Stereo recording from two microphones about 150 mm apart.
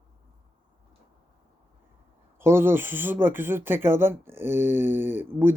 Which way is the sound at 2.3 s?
15° right (ahead or behind).